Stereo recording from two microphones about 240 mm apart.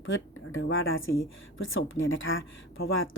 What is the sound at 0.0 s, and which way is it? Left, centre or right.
Speech, left.